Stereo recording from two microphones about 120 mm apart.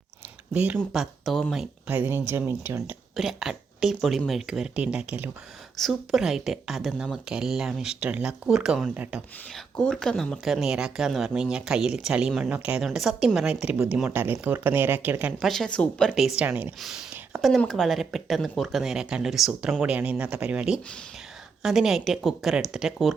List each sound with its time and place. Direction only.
0.5 s a woman's voice: 10° right (ahead or behind)
0.9 s speech: centre (ahead or behind)
1.9 s a woman's voice: 15° right (ahead or behind)
3.2 s a woman's voice: 5° right (ahead or behind)
5.7 s speech: centre (ahead or behind)
9.7 s a woman's voice: 5° left (ahead or behind); by 15.3 s 15° right (ahead or behind)
15.4 s speech: centre (ahead or behind); by 16.7 s 15° right (ahead or behind)
16.8 s a woman's voice: centre (ahead or behind)